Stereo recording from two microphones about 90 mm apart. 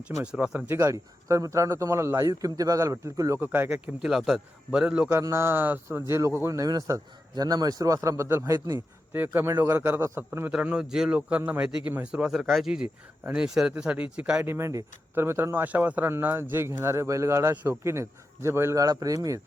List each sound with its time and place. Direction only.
0.2 s a man's voice: 10° right (ahead or behind)
0.7 s a man's voice: 25° right (ahead or behind)
0.9 s a man's voice: 40° right (ahead or behind)
3.4 s a man's voice: 20° right (ahead or behind)
4.0 s a man's voice: 5° right (ahead or behind)
5.1 s a man's voice: 35° right (ahead or behind)
6.5 s a man's voice: 40° right (ahead or behind)
8.5 s a man's voice: 45° right (ahead or behind)
9.1 s a man's voice: 25° right (ahead or behind)
10.5 s a man's voice: 10° right (ahead or behind)
14.4 s a man's voice: 30° right (ahead or behind)